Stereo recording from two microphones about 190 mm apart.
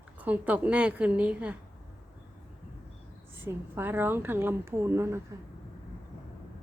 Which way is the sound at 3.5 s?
10° right (ahead or behind).